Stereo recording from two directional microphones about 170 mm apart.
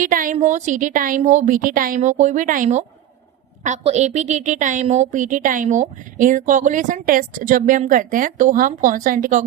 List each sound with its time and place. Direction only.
0.0 s a woman's voice: 50° right (ahead or behind)